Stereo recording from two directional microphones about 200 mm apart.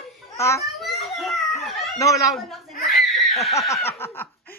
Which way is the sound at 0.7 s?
Centre (ahead or behind).